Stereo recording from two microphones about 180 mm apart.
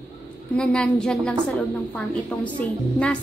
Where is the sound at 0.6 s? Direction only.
5° left (ahead or behind).